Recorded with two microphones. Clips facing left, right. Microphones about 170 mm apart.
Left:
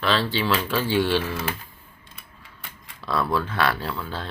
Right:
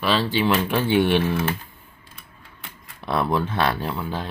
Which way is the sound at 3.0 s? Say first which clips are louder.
Right 2 dB; 20° right (ahead or behind).